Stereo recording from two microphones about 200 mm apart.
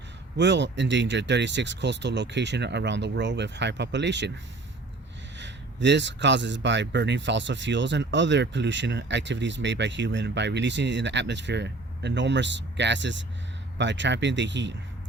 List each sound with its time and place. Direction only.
0.3 s speech: 60° right (ahead or behind)
5.4 s speech: 60° right (ahead or behind)